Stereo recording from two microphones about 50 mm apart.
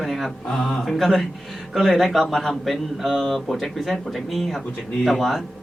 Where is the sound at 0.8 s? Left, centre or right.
Centre.